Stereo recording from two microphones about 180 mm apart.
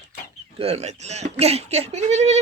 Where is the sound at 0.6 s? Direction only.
35° right (ahead or behind).